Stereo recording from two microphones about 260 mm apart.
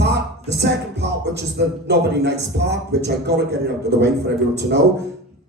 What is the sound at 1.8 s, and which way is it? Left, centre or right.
A man's voice, right.